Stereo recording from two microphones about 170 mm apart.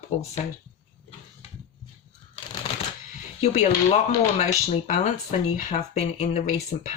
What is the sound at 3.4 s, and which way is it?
Speech, 40° left (ahead or behind).